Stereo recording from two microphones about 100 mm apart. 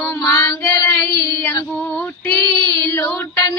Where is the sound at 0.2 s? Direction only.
35° left (ahead or behind).